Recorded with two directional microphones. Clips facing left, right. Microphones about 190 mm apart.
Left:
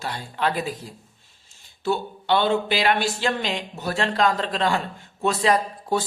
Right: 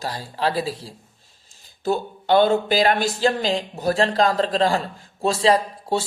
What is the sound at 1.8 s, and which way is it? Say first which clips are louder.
Speech: right 2 dB; 40° right (ahead or behind).